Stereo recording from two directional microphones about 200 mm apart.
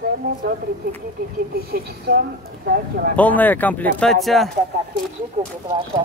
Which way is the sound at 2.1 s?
45° right (ahead or behind).